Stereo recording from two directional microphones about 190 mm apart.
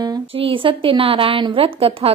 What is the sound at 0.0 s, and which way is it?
A woman's voice, 25° right (ahead or behind).